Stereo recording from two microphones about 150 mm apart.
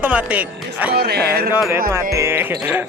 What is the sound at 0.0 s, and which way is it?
Speech, 10° right (ahead or behind).